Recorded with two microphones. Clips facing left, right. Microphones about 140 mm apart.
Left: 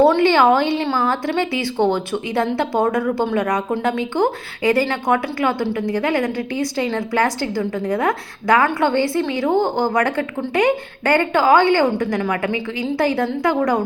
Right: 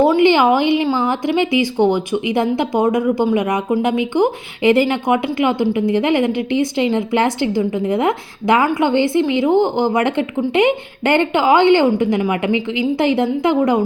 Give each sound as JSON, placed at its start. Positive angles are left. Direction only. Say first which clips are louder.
{"t": 0.2, "sound": "a woman's voice", "louder": "right 2 dB", "side_deg": -15}